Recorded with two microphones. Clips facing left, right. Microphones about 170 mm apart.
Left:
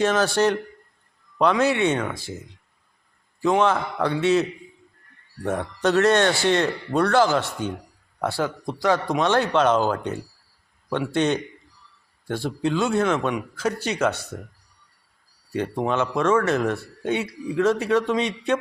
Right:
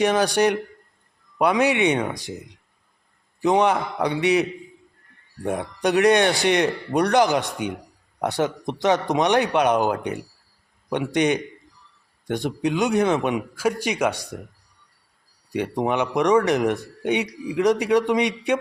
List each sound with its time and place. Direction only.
0.0 s a man's voice: 15° right (ahead or behind)
15.4 s a man's voice: 15° right (ahead or behind)